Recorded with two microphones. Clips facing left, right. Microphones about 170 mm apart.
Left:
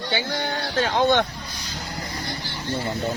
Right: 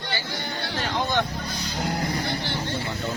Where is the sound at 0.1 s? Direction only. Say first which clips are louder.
Left 6 dB; 60° left (ahead or behind).